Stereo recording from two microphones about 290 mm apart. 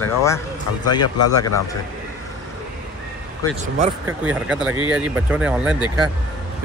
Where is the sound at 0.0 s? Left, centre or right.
Centre.